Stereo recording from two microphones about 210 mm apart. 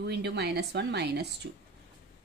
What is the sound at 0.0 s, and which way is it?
A woman's voice, 55° right (ahead or behind).